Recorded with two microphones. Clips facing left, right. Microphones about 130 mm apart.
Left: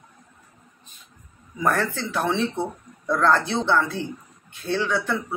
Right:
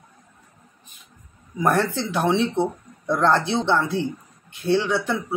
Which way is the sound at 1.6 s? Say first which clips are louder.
Right 3 dB; 15° right (ahead or behind).